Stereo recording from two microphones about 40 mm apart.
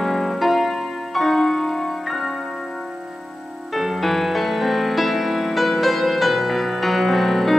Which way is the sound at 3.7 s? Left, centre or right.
Centre.